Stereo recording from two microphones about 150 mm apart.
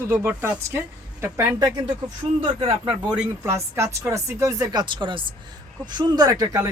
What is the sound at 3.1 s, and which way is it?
Speech, 15° right (ahead or behind).